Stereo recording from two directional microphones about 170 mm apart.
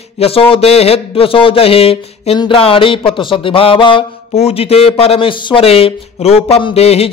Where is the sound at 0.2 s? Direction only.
35° left (ahead or behind).